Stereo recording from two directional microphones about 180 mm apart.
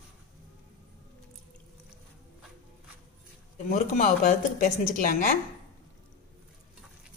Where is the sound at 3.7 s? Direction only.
45° left (ahead or behind).